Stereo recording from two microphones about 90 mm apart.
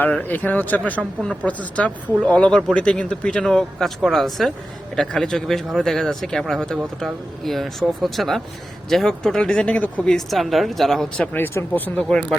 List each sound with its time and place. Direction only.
0.0 s speech: 20° left (ahead or behind); by 11.3 s 5° left (ahead or behind)
11.3 s speech: 25° left (ahead or behind)
12.3 s speech: 5° left (ahead or behind)